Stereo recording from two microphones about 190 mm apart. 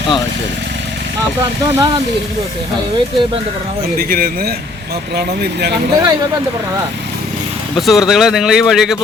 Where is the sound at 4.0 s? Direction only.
50° right (ahead or behind).